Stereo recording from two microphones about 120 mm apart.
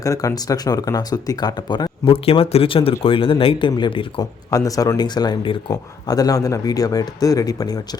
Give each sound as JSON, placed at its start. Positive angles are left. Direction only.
{"t": 0.0, "sound": "speech", "side_deg": 30}
{"t": 4.2, "sound": "speech", "side_deg": 30}
{"t": 5.7, "sound": "speech", "side_deg": 30}